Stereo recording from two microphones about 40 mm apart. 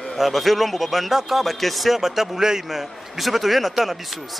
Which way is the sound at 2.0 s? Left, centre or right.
Centre.